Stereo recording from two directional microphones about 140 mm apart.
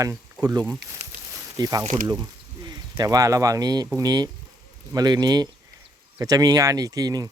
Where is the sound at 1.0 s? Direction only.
50° right (ahead or behind).